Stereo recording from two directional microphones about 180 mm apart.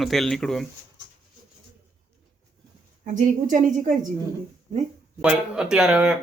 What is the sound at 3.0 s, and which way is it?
Speech, 45° right (ahead or behind).